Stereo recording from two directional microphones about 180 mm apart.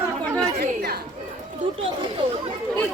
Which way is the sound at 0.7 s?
60° right (ahead or behind).